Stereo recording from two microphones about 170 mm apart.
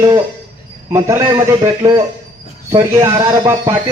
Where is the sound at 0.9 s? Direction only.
15° right (ahead or behind).